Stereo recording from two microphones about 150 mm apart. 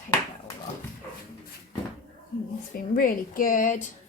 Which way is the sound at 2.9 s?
65° left (ahead or behind).